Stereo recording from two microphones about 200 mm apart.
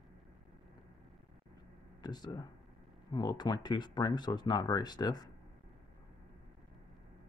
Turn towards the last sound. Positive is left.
turn(degrees=20)  # may be behind; listen again after turning